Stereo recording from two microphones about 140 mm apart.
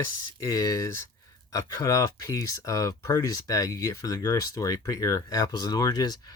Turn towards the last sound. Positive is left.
turn(degrees=30)  # may be behind; listen again after turning